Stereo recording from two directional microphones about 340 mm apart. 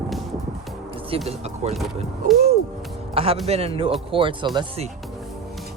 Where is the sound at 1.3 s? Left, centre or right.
Centre.